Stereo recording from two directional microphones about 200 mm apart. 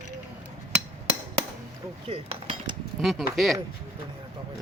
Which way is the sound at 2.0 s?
30° right (ahead or behind).